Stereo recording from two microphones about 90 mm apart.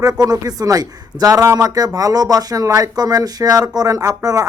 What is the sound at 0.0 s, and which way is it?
Speech, 45° right (ahead or behind).